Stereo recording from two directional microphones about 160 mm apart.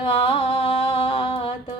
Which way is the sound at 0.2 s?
35° left (ahead or behind).